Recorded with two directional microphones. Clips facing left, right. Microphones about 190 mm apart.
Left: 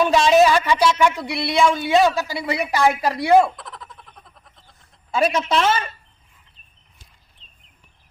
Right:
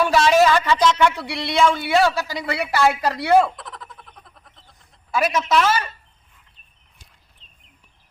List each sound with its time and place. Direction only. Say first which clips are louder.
0.0 s speech: left 1 dB; 20° left (ahead or behind)
3.6 s frog: right 1 dB; centre (ahead or behind)
5.1 s a woman's voice: even; 30° left (ahead or behind)